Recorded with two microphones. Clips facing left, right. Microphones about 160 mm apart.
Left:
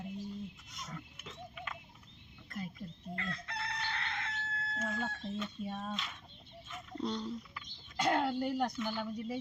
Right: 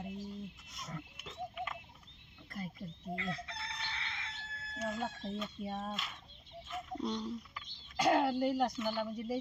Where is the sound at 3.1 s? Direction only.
55° left (ahead or behind).